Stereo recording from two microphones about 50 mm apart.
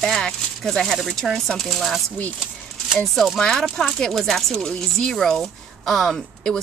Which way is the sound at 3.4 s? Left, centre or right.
Centre.